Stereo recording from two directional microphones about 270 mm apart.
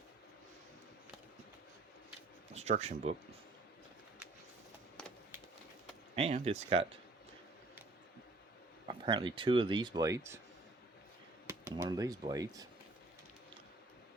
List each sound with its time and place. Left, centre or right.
2.5 s speech: right
6.1 s speech: right
8.9 s speech: centre
11.4 s speech: centre